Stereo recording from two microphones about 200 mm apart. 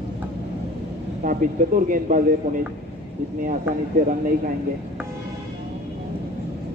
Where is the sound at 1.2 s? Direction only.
45° right (ahead or behind).